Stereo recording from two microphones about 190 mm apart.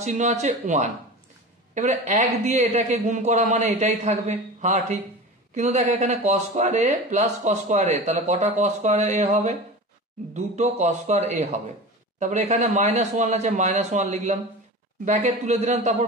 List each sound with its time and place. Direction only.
0.0 s speech: 40° right (ahead or behind)